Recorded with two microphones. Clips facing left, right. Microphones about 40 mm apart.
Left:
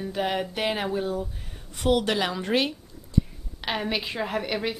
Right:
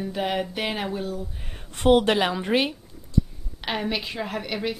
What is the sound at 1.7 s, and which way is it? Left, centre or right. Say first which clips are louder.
Speech: right 5 dB; right.